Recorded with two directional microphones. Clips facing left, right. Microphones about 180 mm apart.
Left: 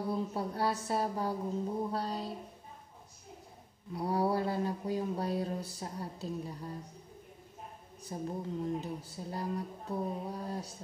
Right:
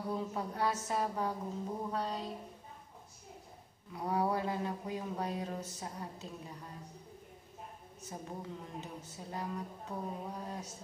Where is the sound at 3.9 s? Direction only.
35° left (ahead or behind).